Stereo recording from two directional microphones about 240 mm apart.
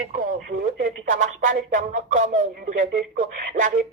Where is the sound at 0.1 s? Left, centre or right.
Right.